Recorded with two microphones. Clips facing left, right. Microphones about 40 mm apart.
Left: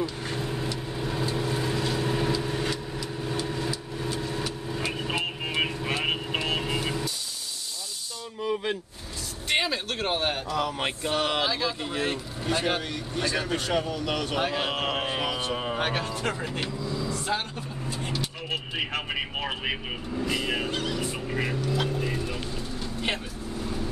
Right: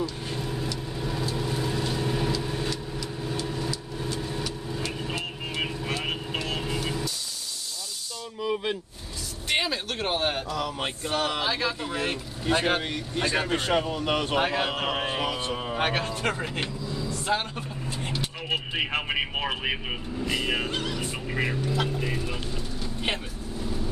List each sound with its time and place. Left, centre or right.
0.4 s vehicle: left
9.5 s a sound: centre
10.5 s mantra: left
11.4 s speech: right
14.8 s a sound: centre
15.5 s a sound: centre
15.8 s speech: right
17.3 s speech: centre
18.0 s vehicle: right
19.4 s speech: centre